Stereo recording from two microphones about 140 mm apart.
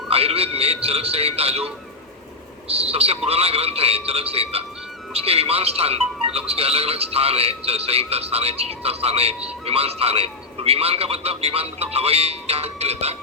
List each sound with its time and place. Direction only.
0.1 s a man's voice: 45° right (ahead or behind)